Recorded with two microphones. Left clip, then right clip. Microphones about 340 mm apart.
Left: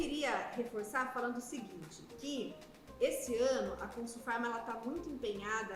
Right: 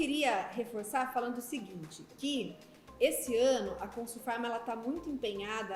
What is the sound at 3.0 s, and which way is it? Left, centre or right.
Speech, left.